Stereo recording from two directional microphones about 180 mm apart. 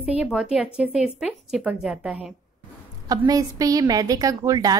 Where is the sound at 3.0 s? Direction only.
20° right (ahead or behind).